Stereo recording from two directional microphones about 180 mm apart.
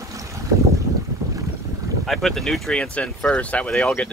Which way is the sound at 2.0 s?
Centre (ahead or behind).